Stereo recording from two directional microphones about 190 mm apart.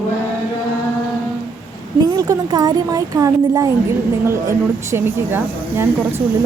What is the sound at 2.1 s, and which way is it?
A woman's voice, 20° right (ahead or behind).